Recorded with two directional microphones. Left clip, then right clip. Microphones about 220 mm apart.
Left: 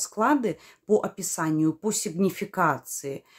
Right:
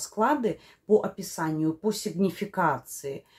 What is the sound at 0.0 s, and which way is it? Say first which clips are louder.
Speech: left 1 dB; 30° left (ahead or behind).